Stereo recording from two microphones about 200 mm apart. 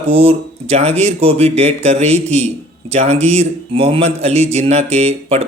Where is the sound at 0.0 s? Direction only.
30° right (ahead or behind).